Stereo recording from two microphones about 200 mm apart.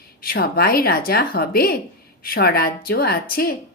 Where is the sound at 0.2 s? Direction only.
50° left (ahead or behind).